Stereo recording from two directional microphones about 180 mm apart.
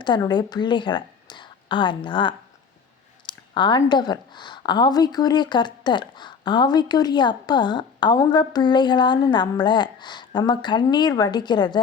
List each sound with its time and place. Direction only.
0.0 s a woman's voice: 25° left (ahead or behind)